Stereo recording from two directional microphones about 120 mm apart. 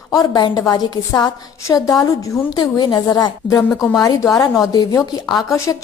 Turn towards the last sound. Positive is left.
turn(degrees=25)  # may be behind; listen again after turning